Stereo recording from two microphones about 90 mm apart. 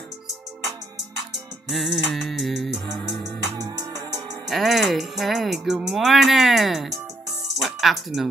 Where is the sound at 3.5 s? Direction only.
45° right (ahead or behind).